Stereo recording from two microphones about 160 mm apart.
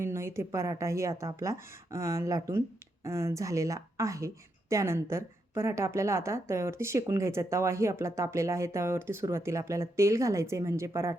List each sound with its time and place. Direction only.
0.0 s a woman's voice: 15° right (ahead or behind)